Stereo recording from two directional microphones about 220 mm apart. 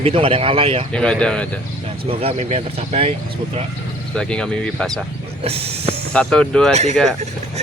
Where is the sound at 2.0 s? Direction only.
30° right (ahead or behind).